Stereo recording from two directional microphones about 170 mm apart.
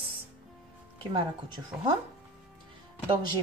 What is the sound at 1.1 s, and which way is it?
Speech, 30° right (ahead or behind).